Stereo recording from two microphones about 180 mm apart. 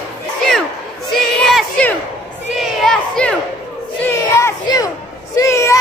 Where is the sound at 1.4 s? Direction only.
5° left (ahead or behind).